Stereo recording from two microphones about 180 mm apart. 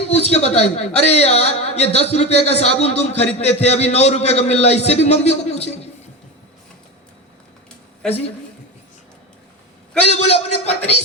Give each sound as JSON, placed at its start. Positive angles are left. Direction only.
{"t": 0.1, "sound": "a man's voice", "side_deg": 35}
{"t": 10.1, "sound": "a man's voice", "side_deg": 35}